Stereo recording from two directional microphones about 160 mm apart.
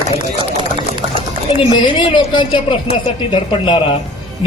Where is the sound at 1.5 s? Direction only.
35° left (ahead or behind).